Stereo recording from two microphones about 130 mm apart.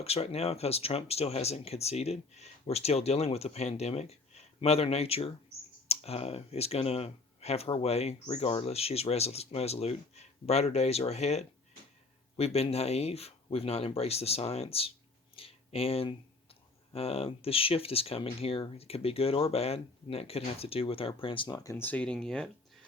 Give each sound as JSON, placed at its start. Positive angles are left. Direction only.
{"t": 0.0, "sound": "speech", "side_deg": 50}
{"t": 21.8, "sound": "speech", "side_deg": 10}